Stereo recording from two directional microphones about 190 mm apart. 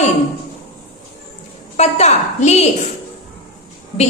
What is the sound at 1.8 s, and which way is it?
Speech, 35° left (ahead or behind).